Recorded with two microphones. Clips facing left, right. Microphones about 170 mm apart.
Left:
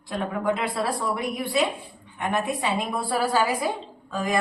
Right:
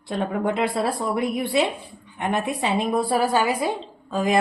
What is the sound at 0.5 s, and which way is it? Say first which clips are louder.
Speech: right 4 dB; 25° right (ahead or behind).